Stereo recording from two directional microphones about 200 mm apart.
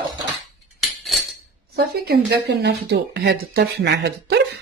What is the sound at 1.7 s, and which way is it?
Speech, 50° right (ahead or behind).